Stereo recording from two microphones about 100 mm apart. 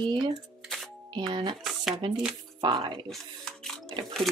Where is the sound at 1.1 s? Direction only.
50° right (ahead or behind).